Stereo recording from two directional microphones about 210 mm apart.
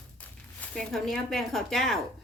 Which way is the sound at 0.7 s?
Centre (ahead or behind).